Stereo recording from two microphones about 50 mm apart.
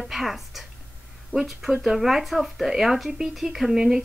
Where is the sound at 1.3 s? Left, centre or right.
Centre.